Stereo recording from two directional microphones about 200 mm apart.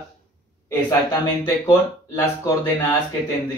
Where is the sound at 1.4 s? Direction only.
15° left (ahead or behind).